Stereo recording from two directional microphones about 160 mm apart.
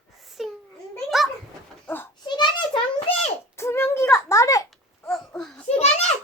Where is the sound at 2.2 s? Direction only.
30° left (ahead or behind).